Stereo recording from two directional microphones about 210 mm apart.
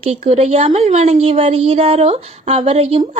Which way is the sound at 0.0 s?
30° right (ahead or behind).